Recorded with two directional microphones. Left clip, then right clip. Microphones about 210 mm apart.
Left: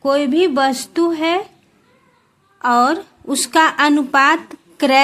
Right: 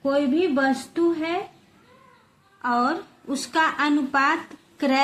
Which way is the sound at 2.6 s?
45° left (ahead or behind).